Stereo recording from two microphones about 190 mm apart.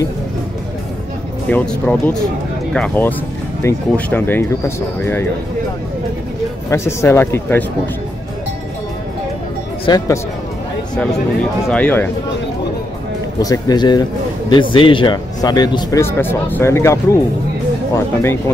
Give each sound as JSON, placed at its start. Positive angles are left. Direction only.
{"t": 1.5, "sound": "speech", "side_deg": 5}
{"t": 6.7, "sound": "speech", "side_deg": 15}
{"t": 9.8, "sound": "speech", "side_deg": 20}
{"t": 11.6, "sound": "speech", "side_deg": 10}
{"t": 13.4, "sound": "speech", "side_deg": 20}